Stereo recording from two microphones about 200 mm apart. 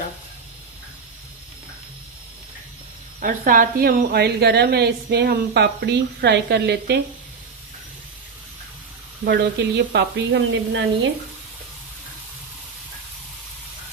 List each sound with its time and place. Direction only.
3.2 s speech: 45° right (ahead or behind)
9.2 s speech: 55° right (ahead or behind)